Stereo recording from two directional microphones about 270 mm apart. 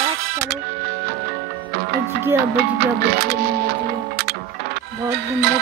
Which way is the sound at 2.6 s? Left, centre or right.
Right.